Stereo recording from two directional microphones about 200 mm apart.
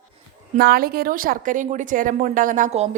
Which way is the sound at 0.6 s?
50° right (ahead or behind).